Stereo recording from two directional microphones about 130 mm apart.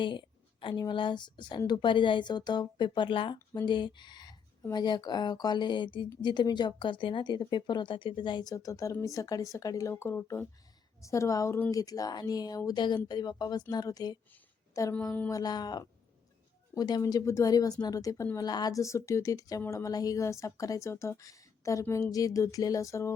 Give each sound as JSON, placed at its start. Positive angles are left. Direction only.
{"t": 0.0, "sound": "speech", "side_deg": 40}
{"t": 15.0, "sound": "a sound", "side_deg": 15}
{"t": 15.3, "sound": "speech", "side_deg": 30}